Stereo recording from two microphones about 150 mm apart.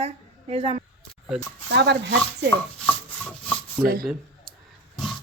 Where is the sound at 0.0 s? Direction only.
40° right (ahead or behind).